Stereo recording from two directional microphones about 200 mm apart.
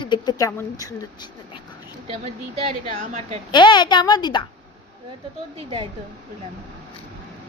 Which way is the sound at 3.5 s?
25° left (ahead or behind).